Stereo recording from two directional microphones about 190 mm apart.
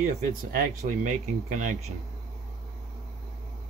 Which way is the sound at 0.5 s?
40° right (ahead or behind).